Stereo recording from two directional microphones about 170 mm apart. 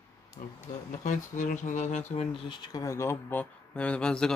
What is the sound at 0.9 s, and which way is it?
Speech, 50° left (ahead or behind).